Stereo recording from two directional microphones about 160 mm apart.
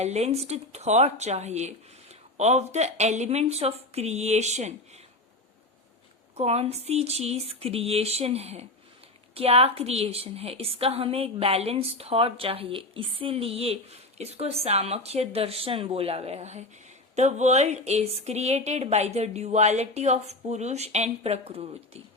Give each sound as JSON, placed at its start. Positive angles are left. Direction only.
{"t": 0.0, "sound": "speech", "side_deg": -40}
{"t": 6.3, "sound": "a woman's voice", "side_deg": -40}